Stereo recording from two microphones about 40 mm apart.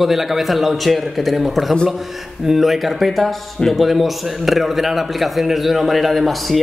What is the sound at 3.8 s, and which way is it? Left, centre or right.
A man's voice, centre.